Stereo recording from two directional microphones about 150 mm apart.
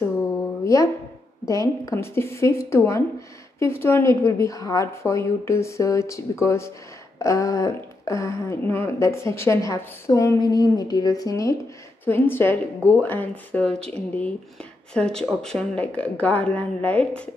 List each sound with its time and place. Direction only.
1.5 s speech: 20° left (ahead or behind)